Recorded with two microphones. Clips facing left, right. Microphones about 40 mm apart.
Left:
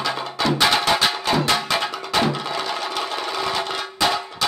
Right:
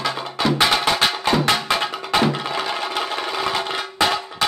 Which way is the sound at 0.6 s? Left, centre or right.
Centre.